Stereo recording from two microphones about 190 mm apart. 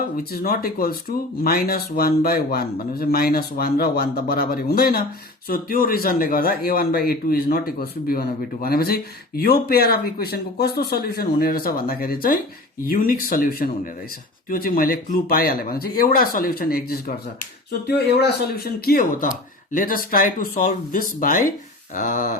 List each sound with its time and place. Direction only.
0.2 s a man's voice: 50° left (ahead or behind)